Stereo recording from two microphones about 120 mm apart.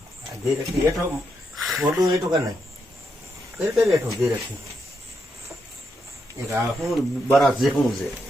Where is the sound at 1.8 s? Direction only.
30° right (ahead or behind).